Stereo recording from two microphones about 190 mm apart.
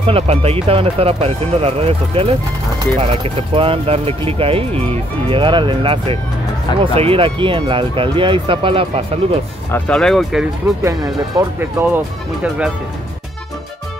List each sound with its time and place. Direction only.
0.0 s speech: 30° right (ahead or behind)
9.7 s speech: 10° left (ahead or behind)
11.3 s speech: 10° right (ahead or behind)